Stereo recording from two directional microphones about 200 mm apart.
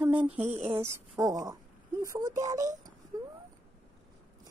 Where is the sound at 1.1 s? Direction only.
15° right (ahead or behind).